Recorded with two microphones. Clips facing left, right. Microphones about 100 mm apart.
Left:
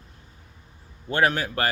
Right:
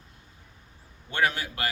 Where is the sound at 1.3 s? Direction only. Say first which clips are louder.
Left 7 dB; 45° left (ahead or behind).